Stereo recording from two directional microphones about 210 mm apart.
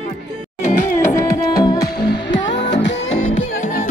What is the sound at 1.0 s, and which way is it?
Music, 15° left (ahead or behind).